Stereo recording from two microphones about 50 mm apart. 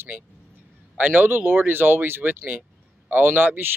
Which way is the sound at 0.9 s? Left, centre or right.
Right.